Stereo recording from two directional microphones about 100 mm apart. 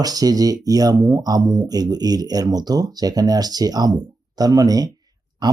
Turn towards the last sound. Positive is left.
turn(degrees=-45)  # may be behind; listen again after turning